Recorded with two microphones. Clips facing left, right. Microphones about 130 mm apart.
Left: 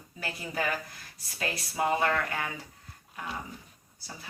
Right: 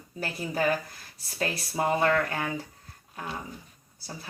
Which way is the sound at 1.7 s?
35° right (ahead or behind).